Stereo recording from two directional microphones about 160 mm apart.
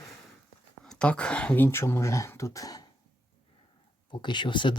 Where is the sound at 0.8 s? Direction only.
5° left (ahead or behind); by 2.9 s 20° left (ahead or behind).